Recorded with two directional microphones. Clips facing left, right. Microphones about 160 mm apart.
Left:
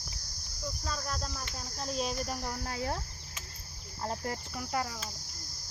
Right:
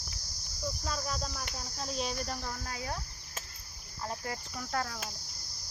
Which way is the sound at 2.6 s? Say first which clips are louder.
Left 4 dB; 35° left (ahead or behind).